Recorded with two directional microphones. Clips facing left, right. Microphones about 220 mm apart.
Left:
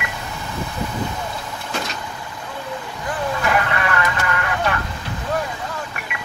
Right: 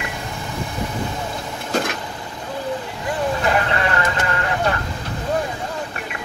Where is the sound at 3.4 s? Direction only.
30° right (ahead or behind).